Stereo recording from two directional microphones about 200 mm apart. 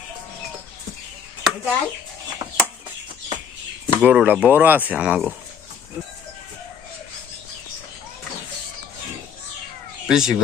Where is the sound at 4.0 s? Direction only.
5° right (ahead or behind).